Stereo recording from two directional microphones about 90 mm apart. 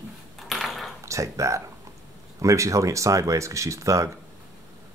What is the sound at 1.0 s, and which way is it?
Speech, 35° right (ahead or behind).